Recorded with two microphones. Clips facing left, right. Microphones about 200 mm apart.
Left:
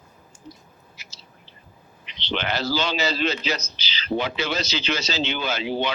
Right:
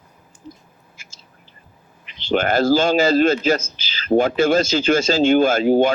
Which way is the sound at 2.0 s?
45° right (ahead or behind).